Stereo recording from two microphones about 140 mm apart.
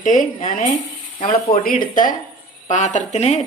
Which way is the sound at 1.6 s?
80° left.